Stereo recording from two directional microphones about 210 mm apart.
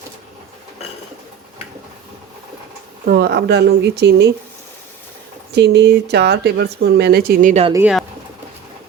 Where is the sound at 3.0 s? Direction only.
45° right (ahead or behind).